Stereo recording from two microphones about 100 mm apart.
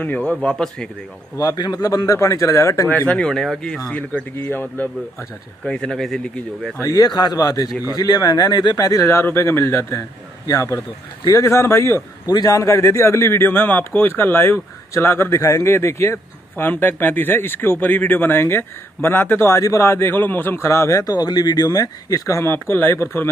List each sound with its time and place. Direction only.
0.0 s speech: 15° left (ahead or behind)
1.3 s speech: 35° left (ahead or behind)
2.9 s speech: 15° left (ahead or behind)
3.9 s speech: 15° left (ahead or behind)
5.7 s speech: 5° left (ahead or behind)
6.8 s a man's voice: 35° left (ahead or behind)
12.3 s a man's voice: 40° left (ahead or behind); by 23.3 s 20° left (ahead or behind)